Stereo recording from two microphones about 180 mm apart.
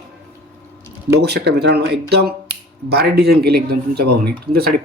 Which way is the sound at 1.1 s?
65° right (ahead or behind).